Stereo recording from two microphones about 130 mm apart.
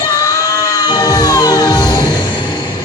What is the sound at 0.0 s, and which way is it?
Music, 30° left (ahead or behind).